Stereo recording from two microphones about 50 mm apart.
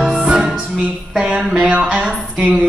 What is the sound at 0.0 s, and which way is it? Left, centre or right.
Music, centre.